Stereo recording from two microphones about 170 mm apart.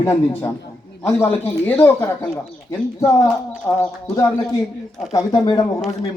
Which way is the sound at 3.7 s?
10° left (ahead or behind).